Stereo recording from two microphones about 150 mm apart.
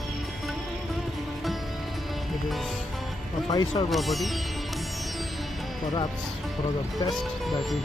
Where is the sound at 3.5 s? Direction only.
25° left (ahead or behind).